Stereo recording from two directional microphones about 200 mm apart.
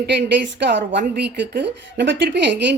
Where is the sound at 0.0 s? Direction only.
55° right (ahead or behind).